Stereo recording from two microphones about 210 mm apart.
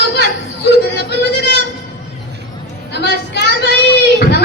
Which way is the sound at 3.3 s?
55° left (ahead or behind).